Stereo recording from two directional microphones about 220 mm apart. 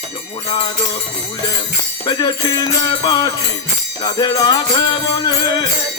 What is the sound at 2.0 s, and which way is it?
Music, 20° left (ahead or behind).